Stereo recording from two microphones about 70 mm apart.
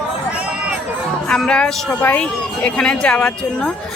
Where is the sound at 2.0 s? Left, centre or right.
Left.